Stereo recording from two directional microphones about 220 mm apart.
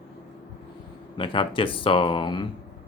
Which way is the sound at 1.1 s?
25° left (ahead or behind).